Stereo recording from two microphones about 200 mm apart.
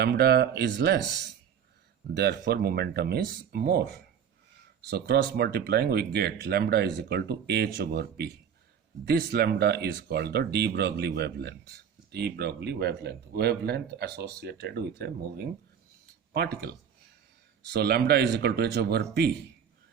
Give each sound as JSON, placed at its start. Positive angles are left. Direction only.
{"t": 0.0, "sound": "speech", "side_deg": -55}